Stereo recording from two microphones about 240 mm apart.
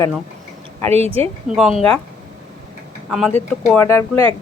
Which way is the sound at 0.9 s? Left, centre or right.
Right.